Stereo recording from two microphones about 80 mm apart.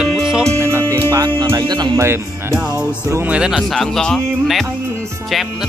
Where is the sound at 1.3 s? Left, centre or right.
Right.